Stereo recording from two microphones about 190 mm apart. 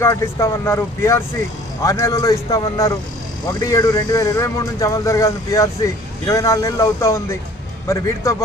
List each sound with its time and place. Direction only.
0.0 s speech: 15° left (ahead or behind)